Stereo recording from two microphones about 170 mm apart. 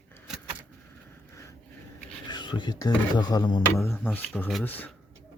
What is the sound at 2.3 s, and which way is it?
Speech, 25° left (ahead or behind).